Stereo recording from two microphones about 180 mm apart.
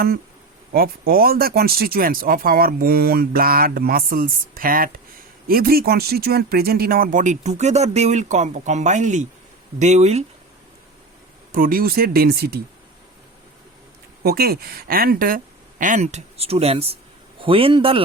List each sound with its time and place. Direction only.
0.7 s speech: 55° right (ahead or behind); by 10.2 s 40° right (ahead or behind)
11.5 s speech: 50° right (ahead or behind)
14.3 s speech: 60° right (ahead or behind)
15.8 s a man's voice: 40° right (ahead or behind)